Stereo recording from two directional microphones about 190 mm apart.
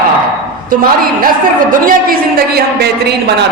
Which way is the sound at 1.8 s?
50° right (ahead or behind).